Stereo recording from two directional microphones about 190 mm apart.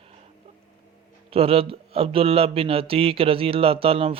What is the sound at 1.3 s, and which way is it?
Speech, 30° right (ahead or behind).